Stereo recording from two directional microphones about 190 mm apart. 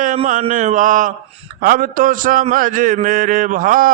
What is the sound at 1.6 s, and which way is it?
A man's voice, 45° right (ahead or behind).